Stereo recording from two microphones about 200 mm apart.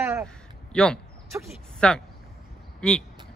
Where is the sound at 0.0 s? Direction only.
10° right (ahead or behind).